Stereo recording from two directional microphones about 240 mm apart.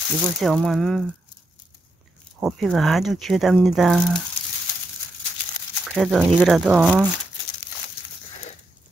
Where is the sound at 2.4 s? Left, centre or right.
Centre.